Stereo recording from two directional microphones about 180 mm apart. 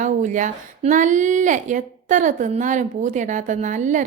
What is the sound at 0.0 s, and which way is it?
A woman's voice, 45° right (ahead or behind).